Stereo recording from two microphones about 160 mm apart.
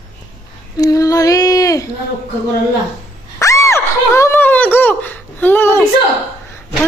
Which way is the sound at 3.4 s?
20° left (ahead or behind).